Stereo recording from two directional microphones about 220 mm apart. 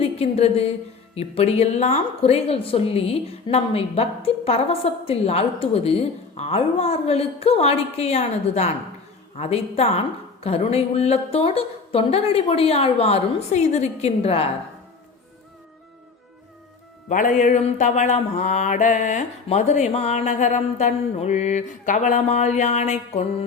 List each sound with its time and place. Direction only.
0.0 s a woman's voice: 25° left (ahead or behind)
17.1 s mantra: 35° left (ahead or behind)